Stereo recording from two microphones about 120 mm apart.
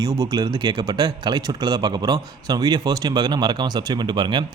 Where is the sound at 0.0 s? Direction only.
30° right (ahead or behind).